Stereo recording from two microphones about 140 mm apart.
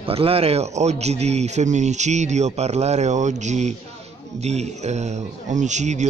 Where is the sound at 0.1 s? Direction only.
45° right (ahead or behind).